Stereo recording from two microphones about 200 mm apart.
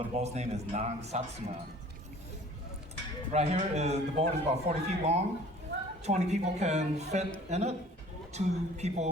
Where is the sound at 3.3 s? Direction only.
35° right (ahead or behind).